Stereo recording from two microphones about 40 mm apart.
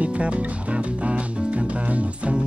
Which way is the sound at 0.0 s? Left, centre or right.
Right.